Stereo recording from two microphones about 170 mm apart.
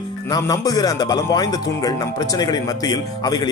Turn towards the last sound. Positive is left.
turn(degrees=25)  # may be behind; listen again after turning